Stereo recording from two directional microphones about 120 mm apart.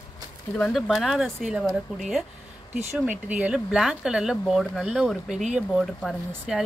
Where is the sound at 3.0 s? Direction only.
10° right (ahead or behind).